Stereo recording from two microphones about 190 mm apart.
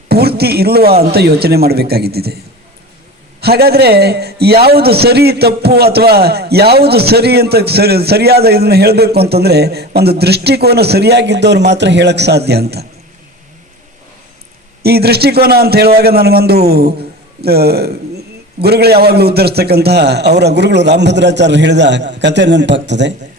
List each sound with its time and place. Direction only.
0.1 s a man's voice: 55° right (ahead or behind)
3.4 s a man's voice: 55° right (ahead or behind)
14.8 s a man's voice: 55° right (ahead or behind)